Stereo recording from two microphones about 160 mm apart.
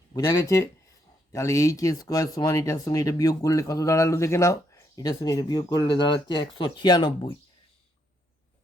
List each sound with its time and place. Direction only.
0.1 s speech: 25° left (ahead or behind)